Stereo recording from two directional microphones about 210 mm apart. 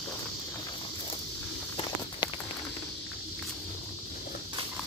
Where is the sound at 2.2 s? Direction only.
20° left (ahead or behind).